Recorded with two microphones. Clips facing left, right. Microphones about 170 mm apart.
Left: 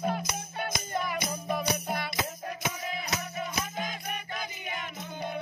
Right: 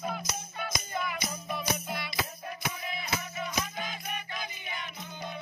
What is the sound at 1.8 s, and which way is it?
Music, 45° left (ahead or behind).